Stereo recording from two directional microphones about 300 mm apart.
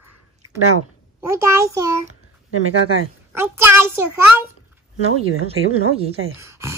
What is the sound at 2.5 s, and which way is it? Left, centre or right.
Speech, right.